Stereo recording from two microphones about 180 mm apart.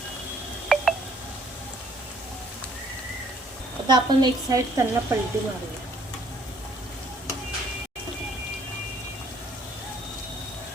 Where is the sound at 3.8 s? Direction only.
25° right (ahead or behind).